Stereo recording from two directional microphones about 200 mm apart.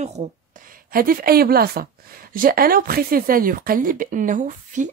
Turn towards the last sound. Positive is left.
turn(degrees=-40)  # may be behind; listen again after turning